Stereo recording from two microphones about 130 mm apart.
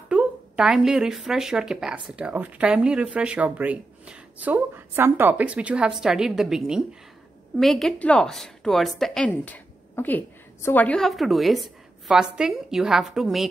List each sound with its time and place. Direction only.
0.1 s a woman's voice: 5° right (ahead or behind)
9.3 s a woman's voice: 15° left (ahead or behind); by 13.5 s centre (ahead or behind)